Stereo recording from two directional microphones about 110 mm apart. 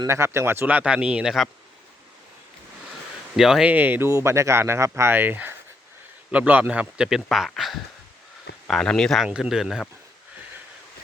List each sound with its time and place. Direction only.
0.1 s a man's voice: 25° right (ahead or behind); by 1.5 s 5° right (ahead or behind)
3.3 s speech: 5° right (ahead or behind)
3.7 s a man's voice: 15° right (ahead or behind)